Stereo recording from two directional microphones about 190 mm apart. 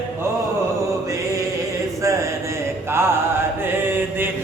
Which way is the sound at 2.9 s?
10° right (ahead or behind).